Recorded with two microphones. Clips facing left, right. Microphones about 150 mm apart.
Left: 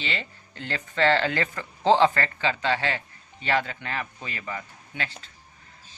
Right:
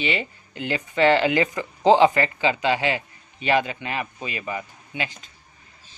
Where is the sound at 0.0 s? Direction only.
15° right (ahead or behind).